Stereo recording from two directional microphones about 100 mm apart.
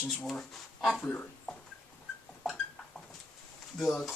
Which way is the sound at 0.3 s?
Centre (ahead or behind).